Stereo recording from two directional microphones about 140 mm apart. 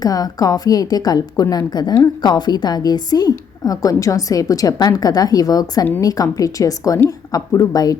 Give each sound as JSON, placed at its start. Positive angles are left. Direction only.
{"t": 0.0, "sound": "a woman's voice", "side_deg": 25}